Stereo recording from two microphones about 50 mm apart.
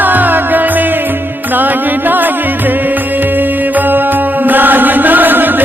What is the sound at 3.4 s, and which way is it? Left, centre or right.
Mantra, right.